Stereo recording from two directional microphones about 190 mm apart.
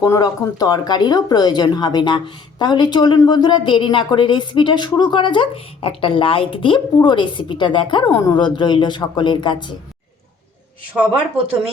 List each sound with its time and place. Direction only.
0.0 s speech: 20° left (ahead or behind)